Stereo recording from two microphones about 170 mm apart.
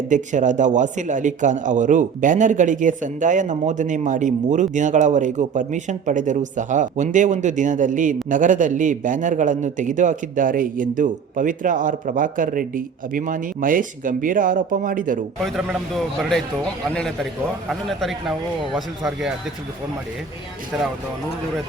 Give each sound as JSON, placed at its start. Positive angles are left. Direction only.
{"t": 0.1, "sound": "a man's voice", "side_deg": -45}
{"t": 15.4, "sound": "speech", "side_deg": 0}
{"t": 17.7, "sound": "speech", "side_deg": 0}